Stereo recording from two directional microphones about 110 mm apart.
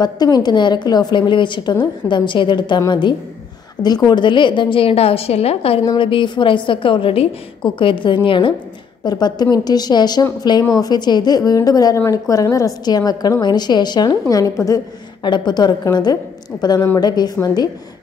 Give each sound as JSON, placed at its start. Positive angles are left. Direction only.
{"t": 0.0, "sound": "a woman's voice", "side_deg": 40}
{"t": 9.0, "sound": "a woman's voice", "side_deg": 40}
{"t": 14.3, "sound": "a woman's voice", "side_deg": 30}
{"t": 15.2, "sound": "a woman's voice", "side_deg": 45}